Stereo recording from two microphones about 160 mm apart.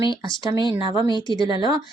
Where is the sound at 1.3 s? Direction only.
25° right (ahead or behind).